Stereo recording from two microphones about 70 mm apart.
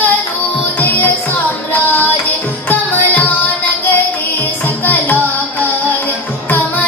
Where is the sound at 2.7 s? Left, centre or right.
Left.